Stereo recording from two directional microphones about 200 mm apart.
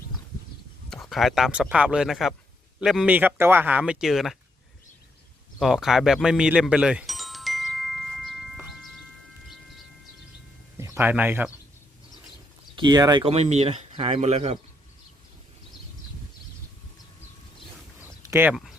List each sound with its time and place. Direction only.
0.9 s speech: centre (ahead or behind)
5.5 s music: centre (ahead or behind)
10.8 s speech: 10° right (ahead or behind)
12.7 s speech: 20° right (ahead or behind)
13.2 s speech: 35° right (ahead or behind)
18.2 s a sound: 10° right (ahead or behind)